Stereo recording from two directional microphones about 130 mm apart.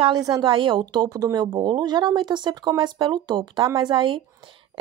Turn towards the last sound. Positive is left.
turn(degrees=-40)  # may be behind; listen again after turning